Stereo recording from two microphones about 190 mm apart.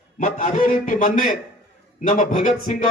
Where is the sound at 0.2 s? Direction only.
40° left (ahead or behind).